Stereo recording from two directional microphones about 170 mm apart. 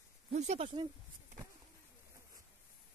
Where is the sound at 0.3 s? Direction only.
40° right (ahead or behind).